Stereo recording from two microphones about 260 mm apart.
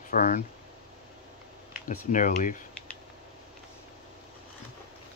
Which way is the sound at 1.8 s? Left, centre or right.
Left.